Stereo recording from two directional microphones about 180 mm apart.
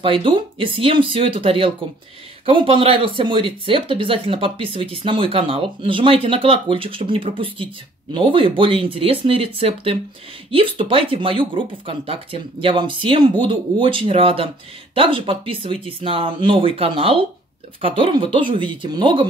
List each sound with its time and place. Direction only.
0.0 s speech: 30° right (ahead or behind)